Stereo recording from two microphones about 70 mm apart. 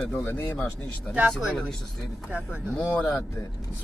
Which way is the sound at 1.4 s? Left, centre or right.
Centre.